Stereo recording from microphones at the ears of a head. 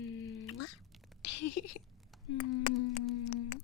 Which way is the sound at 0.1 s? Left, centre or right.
Left.